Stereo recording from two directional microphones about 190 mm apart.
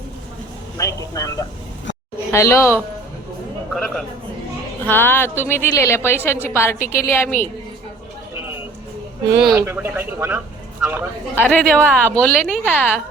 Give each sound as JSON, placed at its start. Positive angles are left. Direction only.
{"t": 0.8, "sound": "a woman's voice", "side_deg": 15}
{"t": 6.7, "sound": "a woman's voice", "side_deg": 45}
{"t": 7.0, "sound": "a woman's voice", "side_deg": 10}
{"t": 9.5, "sound": "speech", "side_deg": -15}
{"t": 11.4, "sound": "a woman's voice", "side_deg": 5}